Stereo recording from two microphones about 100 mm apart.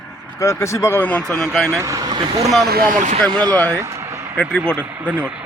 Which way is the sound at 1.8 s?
35° right (ahead or behind).